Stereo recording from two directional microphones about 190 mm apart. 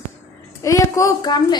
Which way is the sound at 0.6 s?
15° left (ahead or behind).